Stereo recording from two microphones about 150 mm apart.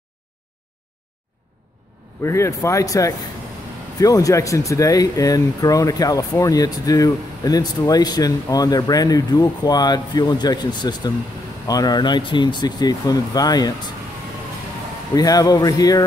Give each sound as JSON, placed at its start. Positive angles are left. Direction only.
{"t": 2.2, "sound": "speech", "side_deg": 20}
{"t": 15.1, "sound": "speech", "side_deg": 25}